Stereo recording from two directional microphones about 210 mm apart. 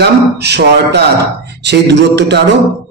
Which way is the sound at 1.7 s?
55° right (ahead or behind).